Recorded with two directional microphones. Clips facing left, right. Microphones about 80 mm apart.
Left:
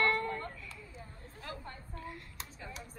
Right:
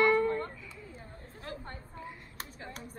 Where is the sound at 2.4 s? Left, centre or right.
Right.